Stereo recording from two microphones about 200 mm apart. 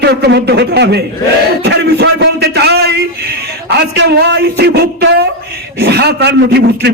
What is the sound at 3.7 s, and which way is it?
Speech, 55° right (ahead or behind).